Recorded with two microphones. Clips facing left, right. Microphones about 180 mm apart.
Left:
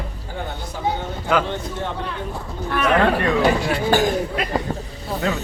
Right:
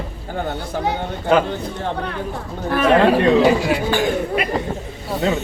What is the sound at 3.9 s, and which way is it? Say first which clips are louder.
Speech: left 5 dB; 40° left (ahead or behind).